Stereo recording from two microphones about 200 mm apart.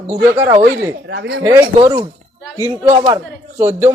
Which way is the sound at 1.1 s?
60° right (ahead or behind).